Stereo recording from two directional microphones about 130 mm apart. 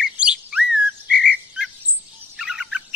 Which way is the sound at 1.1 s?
5° right (ahead or behind).